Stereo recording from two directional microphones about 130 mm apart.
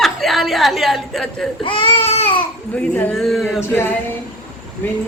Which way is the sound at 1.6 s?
40° left (ahead or behind).